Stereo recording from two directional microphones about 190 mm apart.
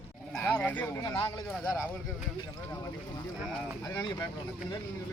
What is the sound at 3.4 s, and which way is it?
Speech, 5° left (ahead or behind).